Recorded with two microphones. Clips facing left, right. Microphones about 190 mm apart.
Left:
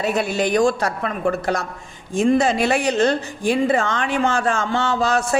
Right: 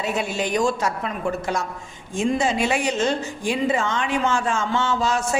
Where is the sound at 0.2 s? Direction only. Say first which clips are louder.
Left 5 dB; 65° left (ahead or behind).